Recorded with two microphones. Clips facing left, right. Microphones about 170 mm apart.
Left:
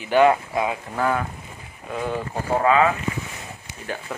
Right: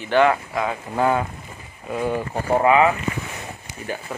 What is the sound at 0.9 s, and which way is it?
Speech, 20° right (ahead or behind).